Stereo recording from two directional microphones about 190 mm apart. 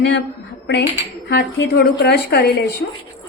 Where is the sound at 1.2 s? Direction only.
60° left (ahead or behind).